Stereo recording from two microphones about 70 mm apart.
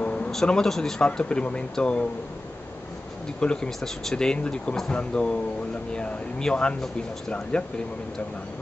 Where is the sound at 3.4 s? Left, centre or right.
Centre.